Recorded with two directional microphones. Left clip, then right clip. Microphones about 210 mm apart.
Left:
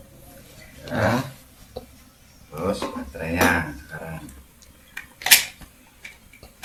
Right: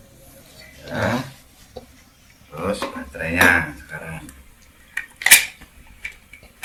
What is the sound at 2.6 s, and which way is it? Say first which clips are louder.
Dishes: right 1 dB; 5° left (ahead or behind).